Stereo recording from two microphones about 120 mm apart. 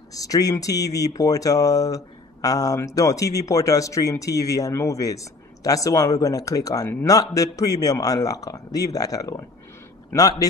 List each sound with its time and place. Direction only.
0.1 s a man's voice: 30° left (ahead or behind)